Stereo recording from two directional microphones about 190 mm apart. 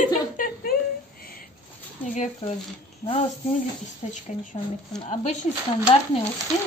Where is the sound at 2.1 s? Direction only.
40° left (ahead or behind).